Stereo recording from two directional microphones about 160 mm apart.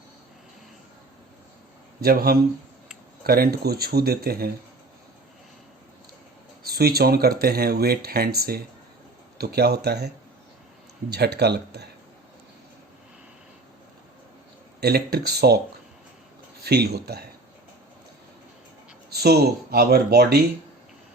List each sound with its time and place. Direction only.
2.0 s speech: 70° right (ahead or behind)
6.6 s speech: 75° right (ahead or behind); by 10.1 s 90° right
11.1 s speech: 90° right
14.8 s speech: 80° right
16.6 s speech: 80° right
19.1 s speech: 85° right